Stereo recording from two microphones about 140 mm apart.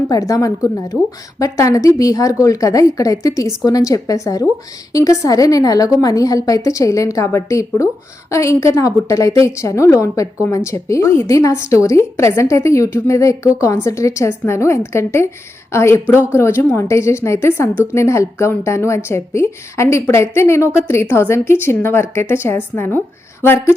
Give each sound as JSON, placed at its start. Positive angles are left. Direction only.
{"t": 0.1, "sound": "a woman's voice", "side_deg": 25}